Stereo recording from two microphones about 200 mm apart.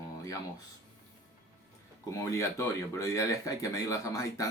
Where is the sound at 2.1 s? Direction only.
15° left (ahead or behind).